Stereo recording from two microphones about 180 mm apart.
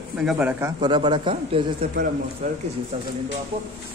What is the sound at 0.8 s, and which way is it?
A man's voice, 25° right (ahead or behind).